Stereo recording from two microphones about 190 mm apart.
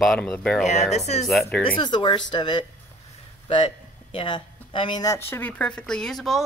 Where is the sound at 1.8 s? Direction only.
25° left (ahead or behind).